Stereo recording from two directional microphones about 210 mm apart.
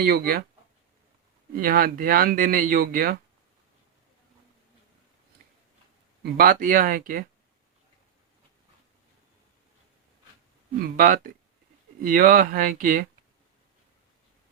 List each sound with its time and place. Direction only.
0.0 s speech: 45° right (ahead or behind)
1.5 s speech: 45° right (ahead or behind)
6.2 s speech: 45° right (ahead or behind)
10.8 s speech: 45° right (ahead or behind)